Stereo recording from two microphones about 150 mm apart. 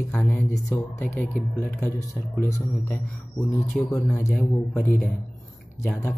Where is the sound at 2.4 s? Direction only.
15° left (ahead or behind).